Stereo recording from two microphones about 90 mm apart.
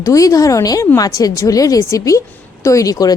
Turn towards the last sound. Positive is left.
turn(degrees=40)  # may be behind; listen again after turning